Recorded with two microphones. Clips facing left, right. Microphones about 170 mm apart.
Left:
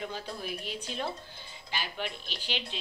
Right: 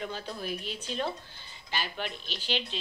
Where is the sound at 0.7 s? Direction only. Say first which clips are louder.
Right 2 dB; 10° left (ahead or behind).